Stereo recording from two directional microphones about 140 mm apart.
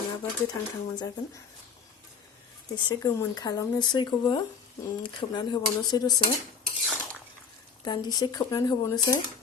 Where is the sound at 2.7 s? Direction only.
25° left (ahead or behind).